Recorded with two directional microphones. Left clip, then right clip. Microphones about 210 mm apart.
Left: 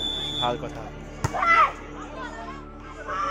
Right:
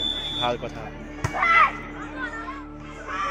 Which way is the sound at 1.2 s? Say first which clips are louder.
Right 1 dB; 20° left (ahead or behind).